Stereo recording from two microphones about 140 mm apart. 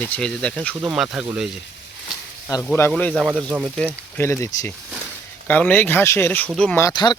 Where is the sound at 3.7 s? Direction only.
15° left (ahead or behind).